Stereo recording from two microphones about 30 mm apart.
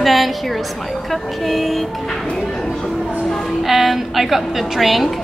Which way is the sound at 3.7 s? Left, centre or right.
Centre.